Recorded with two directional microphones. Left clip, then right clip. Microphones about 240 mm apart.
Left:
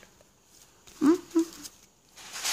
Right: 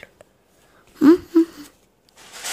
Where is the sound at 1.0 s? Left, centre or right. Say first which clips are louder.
Right 10 dB; centre.